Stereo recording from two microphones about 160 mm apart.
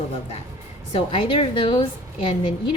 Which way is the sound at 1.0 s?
35° left (ahead or behind).